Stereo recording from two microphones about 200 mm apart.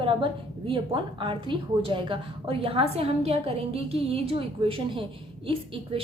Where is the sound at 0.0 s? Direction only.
25° right (ahead or behind).